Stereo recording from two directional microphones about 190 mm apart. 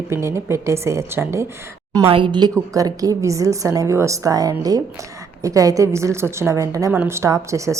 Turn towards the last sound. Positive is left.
turn(degrees=-15)  # may be behind; listen again after turning